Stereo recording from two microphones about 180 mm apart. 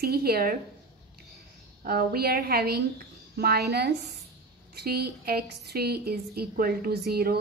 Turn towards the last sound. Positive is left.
turn(degrees=-60)  # may be behind; listen again after turning